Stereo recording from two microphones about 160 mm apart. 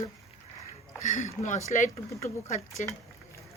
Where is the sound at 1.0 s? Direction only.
45° left (ahead or behind).